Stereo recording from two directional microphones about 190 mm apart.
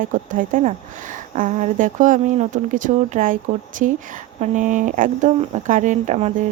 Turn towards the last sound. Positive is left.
turn(degrees=-35)  # may be behind; listen again after turning